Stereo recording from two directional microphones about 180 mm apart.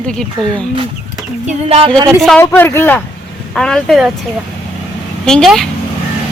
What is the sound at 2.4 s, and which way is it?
Speech, 10° left (ahead or behind).